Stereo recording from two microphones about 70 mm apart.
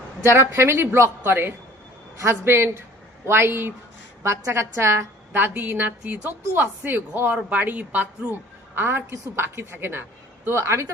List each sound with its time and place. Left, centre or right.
0.3 s a woman's voice: right
6.2 s a woman's voice: right
8.7 s a woman's voice: right